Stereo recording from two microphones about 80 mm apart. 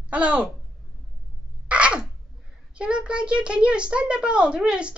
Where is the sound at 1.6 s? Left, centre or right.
Centre.